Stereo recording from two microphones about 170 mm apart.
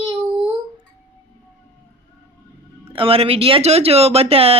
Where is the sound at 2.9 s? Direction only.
35° right (ahead or behind).